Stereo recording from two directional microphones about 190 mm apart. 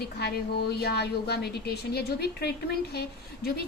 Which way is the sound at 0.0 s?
60° left (ahead or behind).